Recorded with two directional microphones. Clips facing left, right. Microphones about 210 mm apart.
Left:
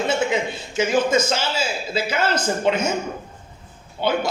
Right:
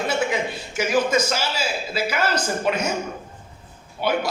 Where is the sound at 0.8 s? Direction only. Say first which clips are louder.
Left 2 dB; 25° left (ahead or behind).